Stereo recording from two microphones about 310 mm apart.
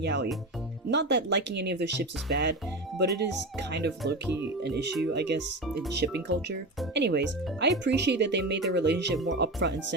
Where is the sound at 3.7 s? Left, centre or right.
Right.